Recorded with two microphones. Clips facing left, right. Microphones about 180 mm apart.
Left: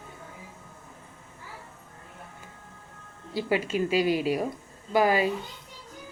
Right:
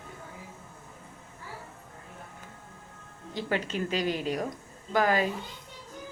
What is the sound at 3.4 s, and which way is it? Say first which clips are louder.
Speech: left 4 dB; 10° left (ahead or behind).